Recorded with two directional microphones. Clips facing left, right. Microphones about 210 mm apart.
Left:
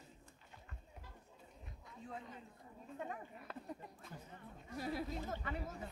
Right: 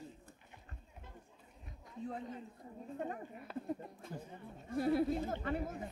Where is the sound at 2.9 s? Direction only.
40° right (ahead or behind).